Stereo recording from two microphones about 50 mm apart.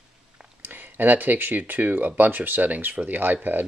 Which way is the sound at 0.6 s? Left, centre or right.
Right.